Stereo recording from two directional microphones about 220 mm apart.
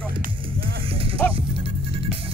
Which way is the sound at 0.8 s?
25° right (ahead or behind).